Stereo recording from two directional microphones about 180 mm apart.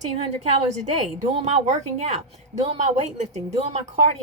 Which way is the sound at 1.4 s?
40° right (ahead or behind).